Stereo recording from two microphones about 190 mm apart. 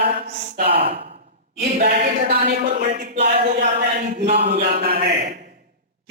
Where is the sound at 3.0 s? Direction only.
55° right (ahead or behind).